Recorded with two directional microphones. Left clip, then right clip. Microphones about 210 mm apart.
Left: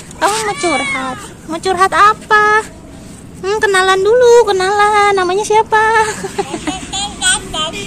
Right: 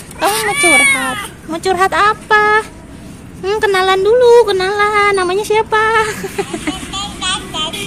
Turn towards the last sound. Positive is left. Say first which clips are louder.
# left 3 dB
turn(degrees=40)  # may be behind; listen again after turning